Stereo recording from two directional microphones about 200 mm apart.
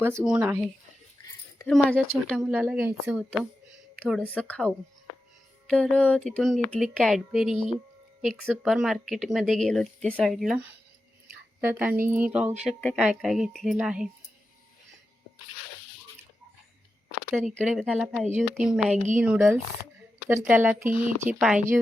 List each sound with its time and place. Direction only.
0.0 s speech: 15° right (ahead or behind)
1.6 s speech: 5° left (ahead or behind)
4.0 s speech: 5° left (ahead or behind)
7.5 s speech: 25° left (ahead or behind)
8.2 s speech: centre (ahead or behind)
12.6 s speech: 5° left (ahead or behind)
17.7 s speech: 5° right (ahead or behind)